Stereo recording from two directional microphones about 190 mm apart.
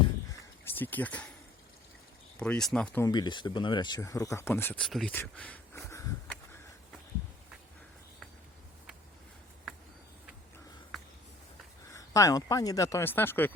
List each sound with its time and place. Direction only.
0.6 s speech: 10° left (ahead or behind)
2.4 s speech: 5° left (ahead or behind)
3.0 s speech: 20° left (ahead or behind)
11.9 s speech: 15° left (ahead or behind)